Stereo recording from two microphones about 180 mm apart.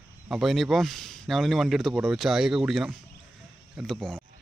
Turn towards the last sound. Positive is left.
turn(degrees=5)  # may be behind; listen again after turning